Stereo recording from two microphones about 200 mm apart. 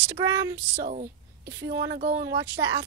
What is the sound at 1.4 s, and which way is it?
Speech, 60° right (ahead or behind).